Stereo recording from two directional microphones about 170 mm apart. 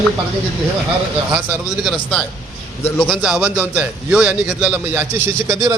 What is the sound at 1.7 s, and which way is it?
A man's voice, centre (ahead or behind).